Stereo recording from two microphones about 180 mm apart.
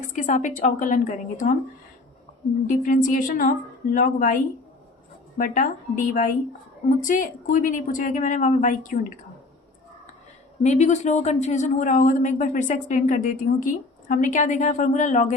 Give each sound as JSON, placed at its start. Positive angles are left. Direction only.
{"t": 0.1, "sound": "speech", "side_deg": 45}
{"t": 2.6, "sound": "speech", "side_deg": 45}
{"t": 5.4, "sound": "speech", "side_deg": 45}
{"t": 10.6, "sound": "speech", "side_deg": 40}